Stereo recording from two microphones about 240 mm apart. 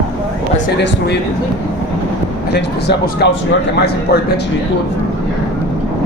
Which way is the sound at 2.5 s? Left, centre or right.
Left.